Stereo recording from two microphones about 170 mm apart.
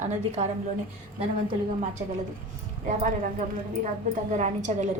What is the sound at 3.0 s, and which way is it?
A woman's voice, 50° right (ahead or behind).